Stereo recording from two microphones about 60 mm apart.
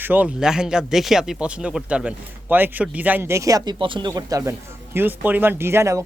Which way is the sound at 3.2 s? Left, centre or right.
Right.